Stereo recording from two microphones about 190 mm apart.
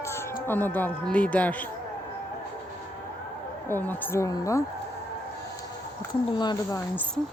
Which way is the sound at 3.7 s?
10° left (ahead or behind).